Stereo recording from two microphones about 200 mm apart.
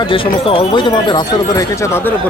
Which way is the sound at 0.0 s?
25° left (ahead or behind).